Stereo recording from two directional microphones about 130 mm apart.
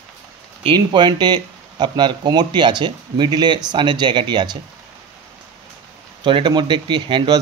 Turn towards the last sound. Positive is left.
turn(degrees=-35)  # may be behind; listen again after turning